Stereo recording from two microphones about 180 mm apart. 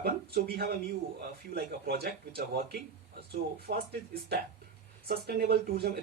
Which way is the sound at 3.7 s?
70° right (ahead or behind).